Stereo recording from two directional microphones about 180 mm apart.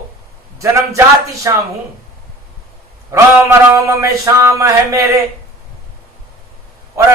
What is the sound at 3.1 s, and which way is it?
Speech, 15° right (ahead or behind).